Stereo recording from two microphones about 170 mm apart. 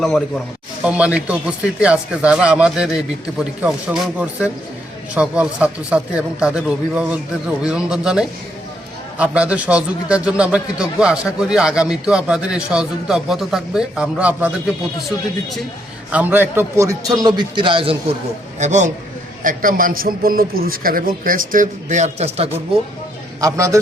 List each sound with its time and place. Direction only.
0.9 s a man's voice: 5° right (ahead or behind)
16.1 s a man's voice: 10° right (ahead or behind); by 17.9 s 30° right (ahead or behind)
18.6 s a man's voice: 45° right (ahead or behind)
23.4 s a man's voice: 20° right (ahead or behind)